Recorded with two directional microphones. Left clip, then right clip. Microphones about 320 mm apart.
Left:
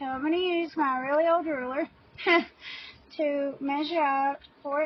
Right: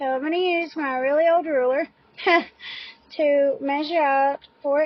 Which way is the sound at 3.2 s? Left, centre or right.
Right.